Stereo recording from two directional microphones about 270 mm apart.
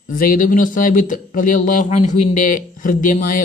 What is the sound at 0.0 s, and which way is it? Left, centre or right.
Speech, left.